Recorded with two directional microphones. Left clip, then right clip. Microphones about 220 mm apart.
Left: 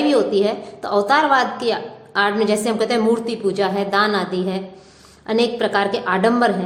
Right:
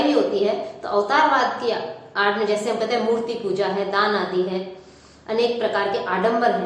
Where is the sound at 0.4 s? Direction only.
55° left (ahead or behind).